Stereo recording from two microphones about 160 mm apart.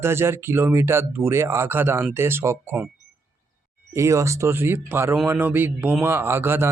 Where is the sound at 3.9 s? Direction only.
20° right (ahead or behind).